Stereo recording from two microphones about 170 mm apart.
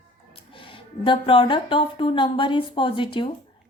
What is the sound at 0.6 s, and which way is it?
Speech, 30° left (ahead or behind).